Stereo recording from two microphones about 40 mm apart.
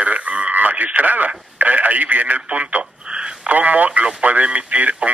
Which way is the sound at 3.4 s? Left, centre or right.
Right.